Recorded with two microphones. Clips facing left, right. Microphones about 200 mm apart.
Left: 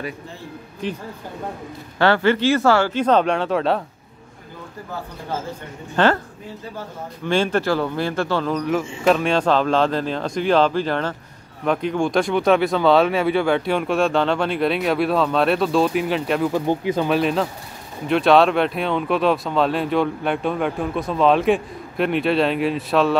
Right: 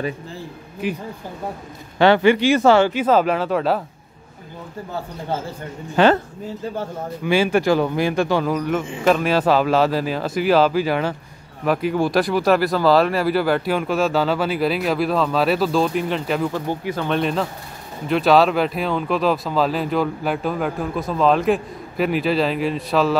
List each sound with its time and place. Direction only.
0.8 s speech: 10° right (ahead or behind)
3.0 s speech: 5° right (ahead or behind)
6.0 s speech: 10° right (ahead or behind)
7.2 s speech: 10° right (ahead or behind)
16.5 s speech: 15° left (ahead or behind)
17.1 s speech: centre (ahead or behind)